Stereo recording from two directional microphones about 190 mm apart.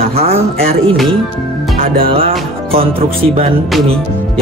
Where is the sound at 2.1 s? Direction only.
30° right (ahead or behind).